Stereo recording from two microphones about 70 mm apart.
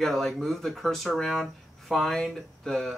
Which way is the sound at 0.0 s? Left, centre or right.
Centre.